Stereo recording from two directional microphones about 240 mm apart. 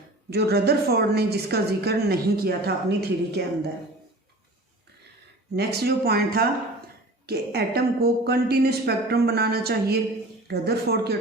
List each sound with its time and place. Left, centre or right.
0.3 s a woman's voice: right
5.5 s a woman's voice: right